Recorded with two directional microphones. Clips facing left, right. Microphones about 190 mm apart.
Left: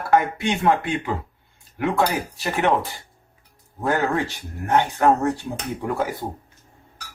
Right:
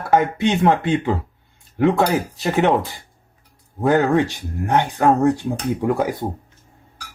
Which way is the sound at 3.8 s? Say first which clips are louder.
Right 6 dB; 15° right (ahead or behind).